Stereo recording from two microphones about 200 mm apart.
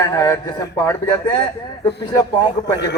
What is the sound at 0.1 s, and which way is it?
A man's voice, 15° left (ahead or behind).